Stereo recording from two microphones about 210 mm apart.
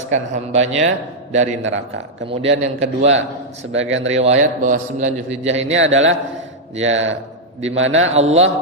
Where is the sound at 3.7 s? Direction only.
65° right (ahead or behind).